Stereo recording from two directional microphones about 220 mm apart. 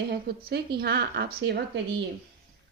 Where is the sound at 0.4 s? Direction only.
45° right (ahead or behind).